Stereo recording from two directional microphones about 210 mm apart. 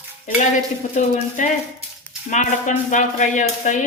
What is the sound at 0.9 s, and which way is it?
Speech, 35° left (ahead or behind).